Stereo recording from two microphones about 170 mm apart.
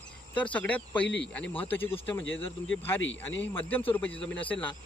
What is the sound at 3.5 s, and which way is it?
Speech, 10° left (ahead or behind).